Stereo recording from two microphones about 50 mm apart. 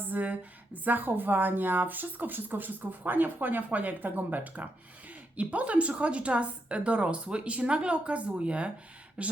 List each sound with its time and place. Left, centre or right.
0.0 s a woman's voice: right